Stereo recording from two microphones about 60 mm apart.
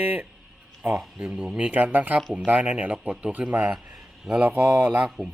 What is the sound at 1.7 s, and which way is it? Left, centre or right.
Speech, right.